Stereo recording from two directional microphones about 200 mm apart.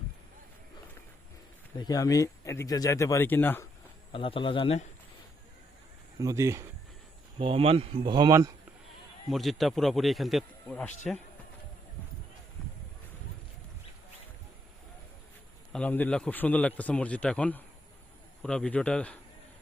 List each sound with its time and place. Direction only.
1.8 s speech: 15° left (ahead or behind)
4.1 s speech: 25° left (ahead or behind)
6.1 s speech: 15° right (ahead or behind)
7.3 s speech: 25° right (ahead or behind)
9.3 s a man's voice: centre (ahead or behind)
15.7 s a man's voice: 5° left (ahead or behind)